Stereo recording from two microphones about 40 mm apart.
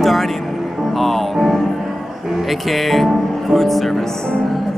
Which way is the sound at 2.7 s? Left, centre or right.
Centre.